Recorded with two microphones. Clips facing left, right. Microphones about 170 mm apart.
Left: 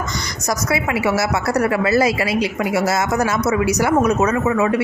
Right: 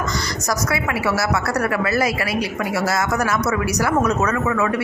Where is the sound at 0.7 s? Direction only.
20° left (ahead or behind).